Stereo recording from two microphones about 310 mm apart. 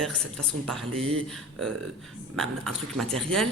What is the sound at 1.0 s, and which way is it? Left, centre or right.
Speech, centre.